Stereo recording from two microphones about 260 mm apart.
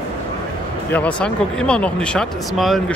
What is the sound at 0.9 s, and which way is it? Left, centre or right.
Speech, centre.